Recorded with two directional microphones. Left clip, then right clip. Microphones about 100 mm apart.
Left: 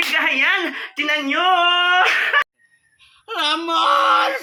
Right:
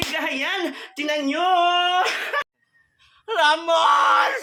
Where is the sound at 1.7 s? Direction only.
50° right (ahead or behind).